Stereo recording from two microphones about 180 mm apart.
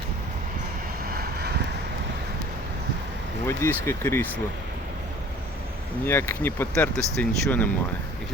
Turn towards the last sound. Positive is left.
turn(degrees=10)  # may be behind; listen again after turning